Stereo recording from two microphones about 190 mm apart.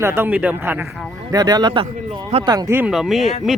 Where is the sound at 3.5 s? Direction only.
Centre (ahead or behind).